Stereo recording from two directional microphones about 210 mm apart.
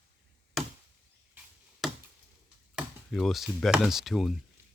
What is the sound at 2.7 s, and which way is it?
Speech, centre (ahead or behind).